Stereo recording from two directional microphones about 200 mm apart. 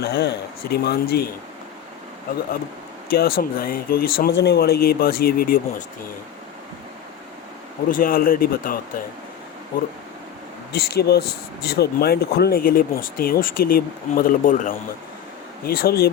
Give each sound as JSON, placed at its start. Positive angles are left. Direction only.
{"t": 0.0, "sound": "speech", "side_deg": 60}
{"t": 3.1, "sound": "speech", "side_deg": 50}
{"t": 7.9, "sound": "speech", "side_deg": 45}
{"t": 10.7, "sound": "speech", "side_deg": 55}